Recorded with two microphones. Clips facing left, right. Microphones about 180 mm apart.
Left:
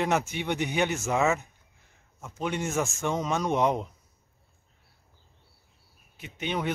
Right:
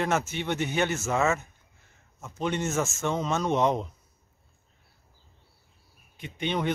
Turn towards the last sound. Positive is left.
turn(degrees=10)  # may be behind; listen again after turning